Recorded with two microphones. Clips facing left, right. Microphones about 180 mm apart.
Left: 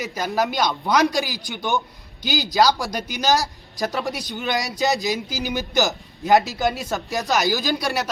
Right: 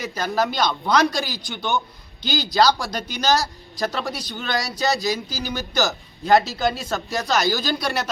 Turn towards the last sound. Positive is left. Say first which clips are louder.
# even
turn(degrees=15)  # may be behind; listen again after turning